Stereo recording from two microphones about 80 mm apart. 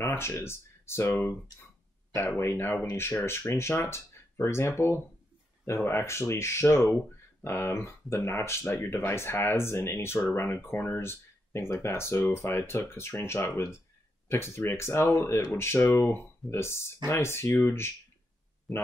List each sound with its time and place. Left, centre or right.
0.0 s a sound: left
0.4 s speech: left
2.9 s speech: left
18.7 s speech: centre